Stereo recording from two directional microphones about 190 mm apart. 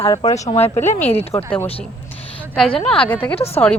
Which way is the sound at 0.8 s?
35° left (ahead or behind).